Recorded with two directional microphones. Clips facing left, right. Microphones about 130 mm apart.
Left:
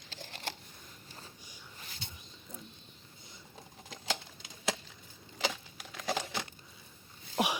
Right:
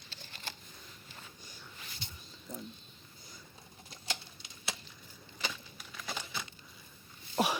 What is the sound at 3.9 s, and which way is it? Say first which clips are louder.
Typewriter: left 7 dB; 90° left.